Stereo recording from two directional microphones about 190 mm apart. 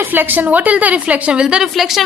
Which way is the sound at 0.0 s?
10° right (ahead or behind).